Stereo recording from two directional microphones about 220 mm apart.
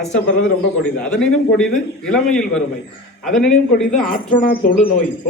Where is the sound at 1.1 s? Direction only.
5° left (ahead or behind).